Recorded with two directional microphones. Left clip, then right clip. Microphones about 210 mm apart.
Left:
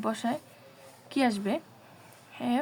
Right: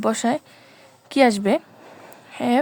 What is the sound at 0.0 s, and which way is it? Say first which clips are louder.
Speech: right 10 dB; 55° right (ahead or behind).